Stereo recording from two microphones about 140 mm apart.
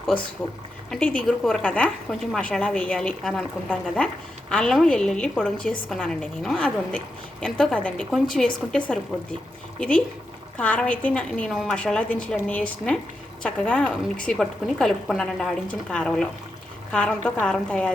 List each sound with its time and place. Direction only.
0.9 s a woman's voice: 10° left (ahead or behind)